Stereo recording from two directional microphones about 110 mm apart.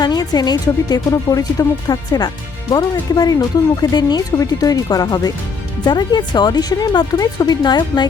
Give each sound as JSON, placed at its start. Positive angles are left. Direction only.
{"t": 0.0, "sound": "speech", "side_deg": 40}